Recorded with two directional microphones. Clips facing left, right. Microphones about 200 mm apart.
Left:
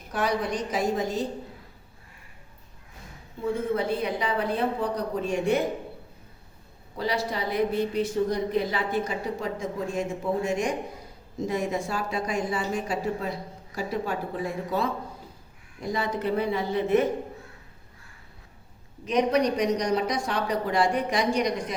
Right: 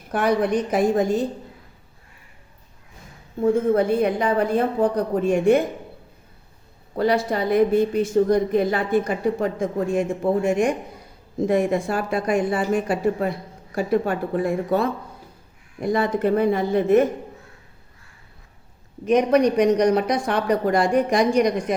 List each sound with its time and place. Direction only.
0.1 s speech: 55° right (ahead or behind)
3.4 s a woman's voice: 50° right (ahead or behind)
6.9 s a woman's voice: 55° right (ahead or behind)
19.0 s a woman's voice: 50° right (ahead or behind)